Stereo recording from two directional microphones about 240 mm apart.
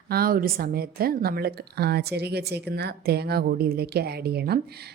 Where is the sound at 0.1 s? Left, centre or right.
Right.